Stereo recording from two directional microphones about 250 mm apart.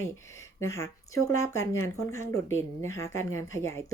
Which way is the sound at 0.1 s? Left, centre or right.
Centre.